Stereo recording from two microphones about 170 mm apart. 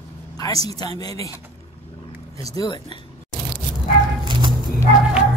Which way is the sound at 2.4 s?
20° left (ahead or behind).